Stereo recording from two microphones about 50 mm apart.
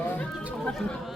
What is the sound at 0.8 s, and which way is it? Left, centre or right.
Chatter, centre.